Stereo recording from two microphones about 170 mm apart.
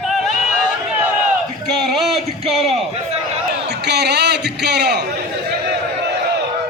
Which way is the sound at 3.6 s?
80° right.